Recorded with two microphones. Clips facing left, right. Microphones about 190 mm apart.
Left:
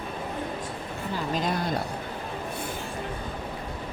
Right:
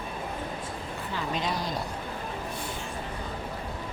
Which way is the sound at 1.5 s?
55° left (ahead or behind).